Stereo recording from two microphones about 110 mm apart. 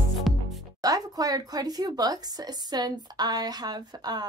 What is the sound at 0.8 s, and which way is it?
Speech, 35° right (ahead or behind).